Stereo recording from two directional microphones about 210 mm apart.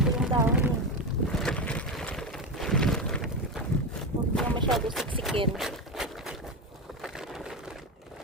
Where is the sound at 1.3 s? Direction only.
5° left (ahead or behind).